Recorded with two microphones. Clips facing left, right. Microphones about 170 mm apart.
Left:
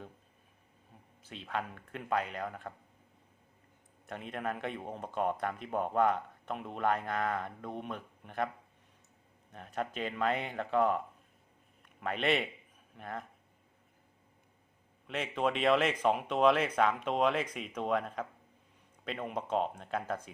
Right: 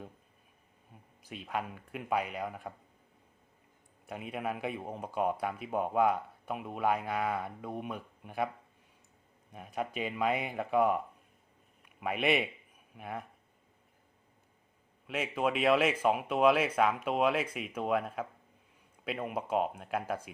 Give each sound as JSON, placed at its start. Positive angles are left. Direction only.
{"t": 1.2, "sound": "speech", "side_deg": -10}
{"t": 4.0, "sound": "speech", "side_deg": -10}
{"t": 9.5, "sound": "a man's voice", "side_deg": -10}
{"t": 15.0, "sound": "speech", "side_deg": -10}